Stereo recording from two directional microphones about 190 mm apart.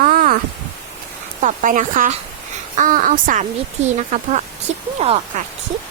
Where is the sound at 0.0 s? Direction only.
45° right (ahead or behind).